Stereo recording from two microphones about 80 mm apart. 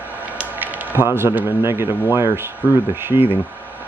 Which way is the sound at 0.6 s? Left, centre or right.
Right.